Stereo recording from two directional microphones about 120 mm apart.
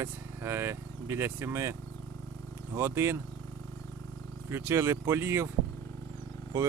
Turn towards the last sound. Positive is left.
turn(degrees=-25)  # may be behind; listen again after turning